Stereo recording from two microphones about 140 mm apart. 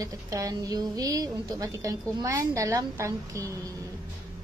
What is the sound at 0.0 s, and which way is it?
A woman's voice, 25° right (ahead or behind).